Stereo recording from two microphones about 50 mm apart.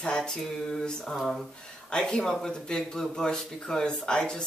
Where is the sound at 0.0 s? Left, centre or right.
Centre.